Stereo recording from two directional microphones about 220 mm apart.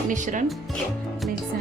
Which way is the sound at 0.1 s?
35° right (ahead or behind).